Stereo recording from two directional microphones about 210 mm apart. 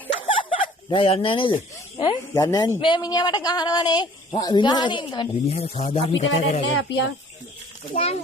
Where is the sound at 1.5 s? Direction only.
20° left (ahead or behind).